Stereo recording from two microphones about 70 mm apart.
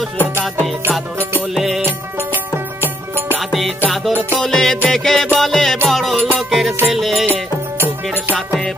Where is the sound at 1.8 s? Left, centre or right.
Right.